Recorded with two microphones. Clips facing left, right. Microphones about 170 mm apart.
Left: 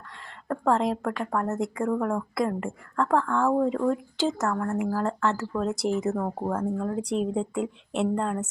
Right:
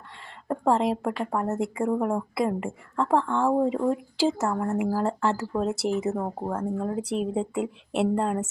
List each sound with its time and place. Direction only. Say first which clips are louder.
0.4 s a woman's voice: right 1 dB; 10° right (ahead or behind)
3.2 s a woman's voice: right 1 dB; 25° right (ahead or behind)
4.9 s a woman's voice: right 1 dB; 10° right (ahead or behind)